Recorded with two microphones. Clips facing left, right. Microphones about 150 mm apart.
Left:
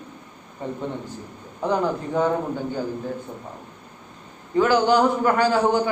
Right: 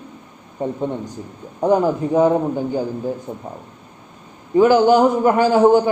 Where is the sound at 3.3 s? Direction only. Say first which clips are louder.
Right 6 dB; 25° right (ahead or behind).